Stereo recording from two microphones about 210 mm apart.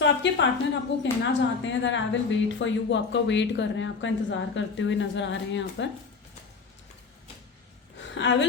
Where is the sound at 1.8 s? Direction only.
60° left (ahead or behind).